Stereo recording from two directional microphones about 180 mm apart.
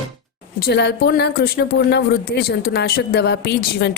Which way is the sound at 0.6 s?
65° left (ahead or behind).